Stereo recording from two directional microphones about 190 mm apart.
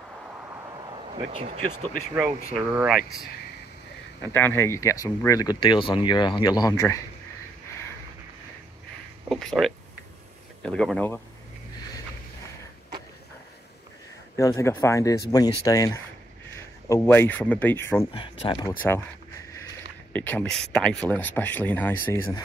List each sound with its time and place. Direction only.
1.2 s speech: 35° right (ahead or behind)
2.7 s speech: 5° right (ahead or behind)
4.2 s speech: 10° left (ahead or behind)
9.3 s speech: centre (ahead or behind)
14.3 s speech: 15° left (ahead or behind)
18.1 s speech: 25° left (ahead or behind)
20.1 s speech: 10° left (ahead or behind)